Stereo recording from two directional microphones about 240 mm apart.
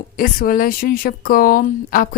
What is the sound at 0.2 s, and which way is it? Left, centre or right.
A woman's voice, left.